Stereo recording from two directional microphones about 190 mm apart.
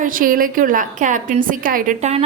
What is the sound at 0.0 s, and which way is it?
A woman's voice, 50° right (ahead or behind).